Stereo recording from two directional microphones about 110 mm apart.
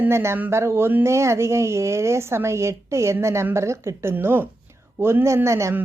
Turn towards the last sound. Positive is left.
turn(degrees=-25)  # may be behind; listen again after turning